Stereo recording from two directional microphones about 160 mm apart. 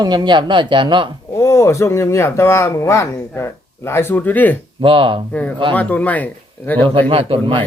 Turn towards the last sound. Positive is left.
turn(degrees=-35)  # may be behind; listen again after turning